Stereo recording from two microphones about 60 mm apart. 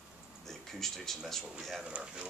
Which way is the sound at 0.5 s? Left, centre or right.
Centre.